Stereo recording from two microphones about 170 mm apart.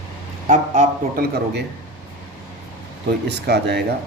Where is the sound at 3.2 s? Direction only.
80° right.